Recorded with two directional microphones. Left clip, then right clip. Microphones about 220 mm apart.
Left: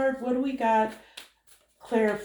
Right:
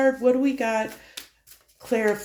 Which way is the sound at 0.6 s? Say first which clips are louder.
Left 1 dB; 55° right (ahead or behind).